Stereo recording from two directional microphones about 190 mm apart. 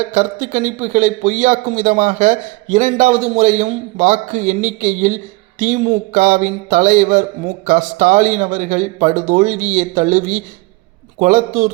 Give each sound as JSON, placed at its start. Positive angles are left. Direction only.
{"t": 0.1, "sound": "a man's voice", "side_deg": -40}